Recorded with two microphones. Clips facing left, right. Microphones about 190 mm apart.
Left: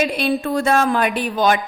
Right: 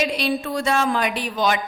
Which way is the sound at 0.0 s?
50° left (ahead or behind).